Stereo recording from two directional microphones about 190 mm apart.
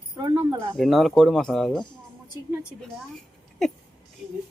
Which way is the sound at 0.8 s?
Centre (ahead or behind).